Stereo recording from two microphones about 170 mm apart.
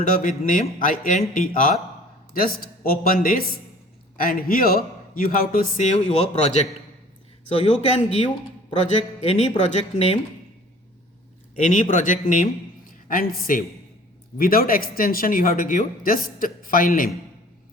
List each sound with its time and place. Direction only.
0.0 s a man's voice: 55° left (ahead or behind)
9.2 s a man's voice: 35° left (ahead or behind)
11.5 s a woman's voice: 50° left (ahead or behind)